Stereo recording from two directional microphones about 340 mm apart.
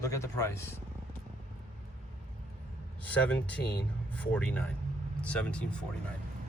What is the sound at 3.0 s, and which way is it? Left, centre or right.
Speech, centre.